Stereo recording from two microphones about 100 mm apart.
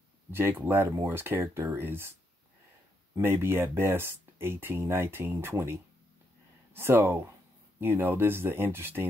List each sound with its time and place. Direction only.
0.3 s speech: 20° right (ahead or behind)
3.2 s speech: 25° right (ahead or behind)